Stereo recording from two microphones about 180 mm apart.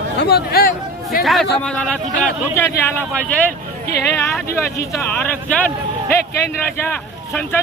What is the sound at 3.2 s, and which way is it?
Speech, 5° left (ahead or behind).